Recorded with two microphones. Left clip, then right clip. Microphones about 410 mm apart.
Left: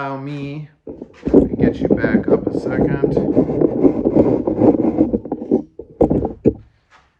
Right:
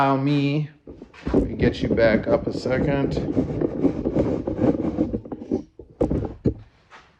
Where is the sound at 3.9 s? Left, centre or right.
Left.